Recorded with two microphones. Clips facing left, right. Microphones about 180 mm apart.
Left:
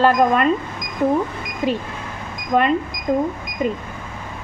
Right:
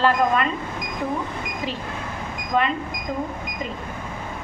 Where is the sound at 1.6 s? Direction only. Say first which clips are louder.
Left 10 dB; 50° left (ahead or behind).